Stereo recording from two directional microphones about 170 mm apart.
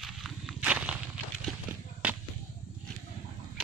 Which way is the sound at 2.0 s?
10° right (ahead or behind).